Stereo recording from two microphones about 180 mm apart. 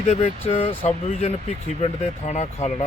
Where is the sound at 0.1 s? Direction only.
35° left (ahead or behind).